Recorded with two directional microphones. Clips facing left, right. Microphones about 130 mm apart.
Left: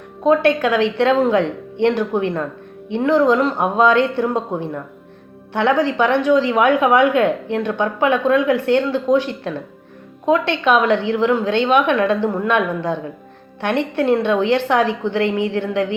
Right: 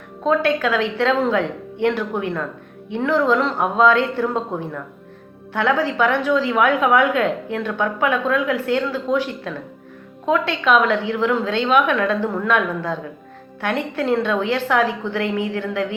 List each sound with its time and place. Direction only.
0.2 s a woman's voice: 20° left (ahead or behind)
5.8 s a woman's voice: 20° left (ahead or behind)